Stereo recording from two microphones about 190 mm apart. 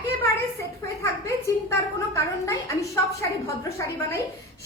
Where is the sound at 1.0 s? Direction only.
15° left (ahead or behind).